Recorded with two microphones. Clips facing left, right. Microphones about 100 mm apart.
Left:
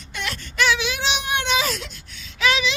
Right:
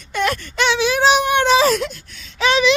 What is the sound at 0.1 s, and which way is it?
Wail, 50° right (ahead or behind).